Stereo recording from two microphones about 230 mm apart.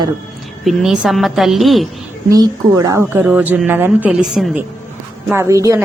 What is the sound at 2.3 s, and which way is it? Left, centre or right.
Speech, centre.